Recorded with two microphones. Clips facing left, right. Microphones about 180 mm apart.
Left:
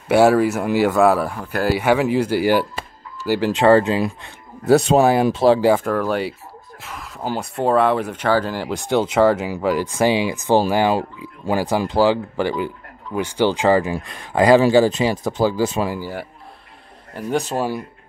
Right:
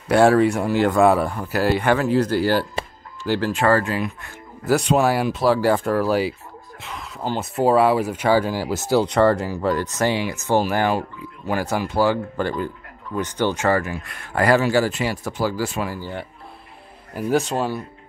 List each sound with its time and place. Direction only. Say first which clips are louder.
0.1 s speech: left 1 dB; 5° left (ahead or behind); by 5.7 s 25° left (ahead or behind)
5.9 s speech: right 1 dB; 5° right (ahead or behind); by 16.0 s 20° left (ahead or behind)
16.0 s speech: left 2 dB; 5° left (ahead or behind)